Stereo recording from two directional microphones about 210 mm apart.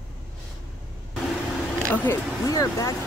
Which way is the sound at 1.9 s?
10° left (ahead or behind).